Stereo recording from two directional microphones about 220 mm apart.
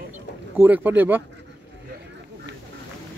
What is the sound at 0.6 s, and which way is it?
Speech, 10° right (ahead or behind).